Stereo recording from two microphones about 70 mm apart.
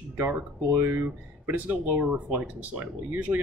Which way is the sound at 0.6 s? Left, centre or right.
Right.